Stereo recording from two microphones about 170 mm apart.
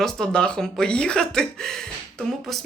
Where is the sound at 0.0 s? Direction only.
5° left (ahead or behind).